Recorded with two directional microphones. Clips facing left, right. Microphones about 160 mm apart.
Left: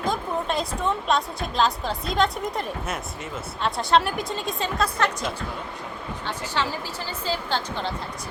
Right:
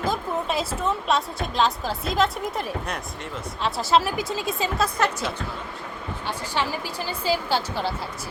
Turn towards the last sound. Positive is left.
turn(degrees=-5)  # may be behind; listen again after turning